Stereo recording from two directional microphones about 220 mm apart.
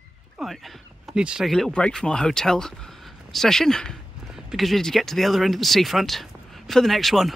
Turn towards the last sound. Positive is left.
turn(degrees=0)  # may be behind; listen again after turning